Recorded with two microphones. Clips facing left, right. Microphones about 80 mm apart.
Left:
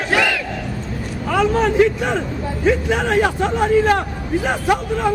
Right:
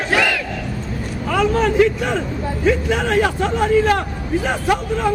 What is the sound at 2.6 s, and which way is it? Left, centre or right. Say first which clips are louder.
A man's voice: left 1 dB; left.